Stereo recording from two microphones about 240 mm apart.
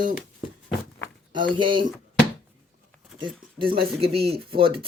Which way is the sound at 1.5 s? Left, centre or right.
Right.